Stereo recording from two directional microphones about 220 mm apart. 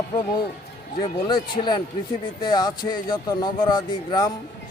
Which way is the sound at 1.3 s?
20° left (ahead or behind).